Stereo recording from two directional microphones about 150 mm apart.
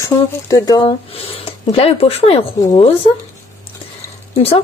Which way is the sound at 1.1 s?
40° left (ahead or behind).